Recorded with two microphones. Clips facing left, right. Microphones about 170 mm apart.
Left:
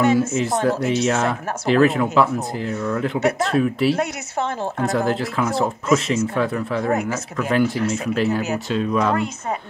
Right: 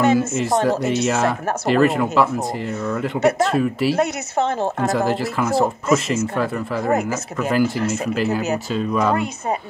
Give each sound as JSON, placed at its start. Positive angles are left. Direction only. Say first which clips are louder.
{"t": 0.0, "sound": "speech", "louder": "even", "side_deg": -25}
{"t": 0.3, "sound": "speech", "louder": "right 1 dB", "side_deg": 0}